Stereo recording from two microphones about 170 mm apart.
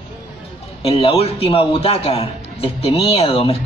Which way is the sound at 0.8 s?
30° left (ahead or behind).